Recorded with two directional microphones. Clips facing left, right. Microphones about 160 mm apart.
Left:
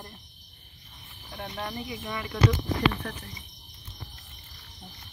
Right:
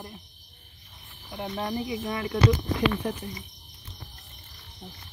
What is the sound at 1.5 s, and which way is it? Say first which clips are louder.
Speech: right 6 dB; 25° right (ahead or behind).